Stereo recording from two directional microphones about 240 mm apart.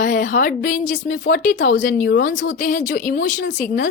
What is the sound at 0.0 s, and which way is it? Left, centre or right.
A woman's voice, left.